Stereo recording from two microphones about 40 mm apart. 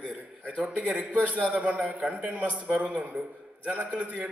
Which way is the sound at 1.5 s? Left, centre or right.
Right.